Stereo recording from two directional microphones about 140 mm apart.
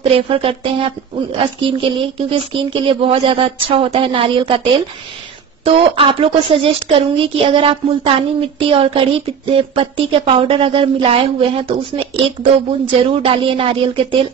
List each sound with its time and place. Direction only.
0.1 s a woman's voice: 40° right (ahead or behind)
13.1 s a woman's voice: 40° right (ahead or behind)